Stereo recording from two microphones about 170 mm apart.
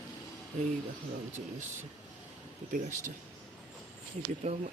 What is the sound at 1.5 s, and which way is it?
Speech, 45° right (ahead or behind).